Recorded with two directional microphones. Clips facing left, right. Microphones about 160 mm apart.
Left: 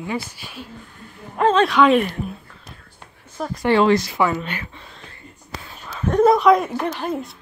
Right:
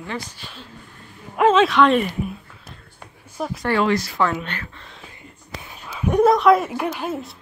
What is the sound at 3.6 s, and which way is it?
Speech, 25° left (ahead or behind).